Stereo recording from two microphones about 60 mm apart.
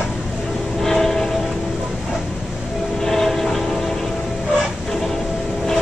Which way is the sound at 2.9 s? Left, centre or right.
Centre.